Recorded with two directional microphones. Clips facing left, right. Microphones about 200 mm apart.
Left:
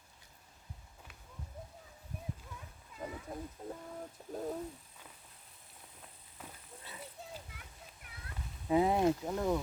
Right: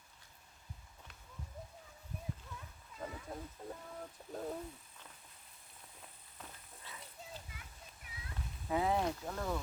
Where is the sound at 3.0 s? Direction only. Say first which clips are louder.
Left 2 dB; 15° left (ahead or behind).